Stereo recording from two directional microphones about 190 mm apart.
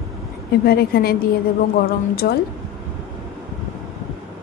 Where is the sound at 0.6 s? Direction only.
55° left (ahead or behind).